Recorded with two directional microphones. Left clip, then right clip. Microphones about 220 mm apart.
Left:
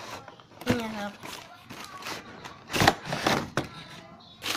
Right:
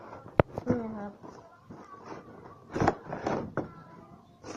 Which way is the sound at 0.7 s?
30° left (ahead or behind).